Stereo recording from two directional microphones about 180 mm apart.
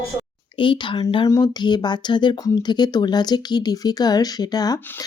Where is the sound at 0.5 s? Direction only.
25° left (ahead or behind).